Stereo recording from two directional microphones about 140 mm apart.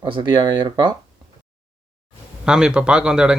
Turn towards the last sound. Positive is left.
turn(degrees=-5)  # may be behind; listen again after turning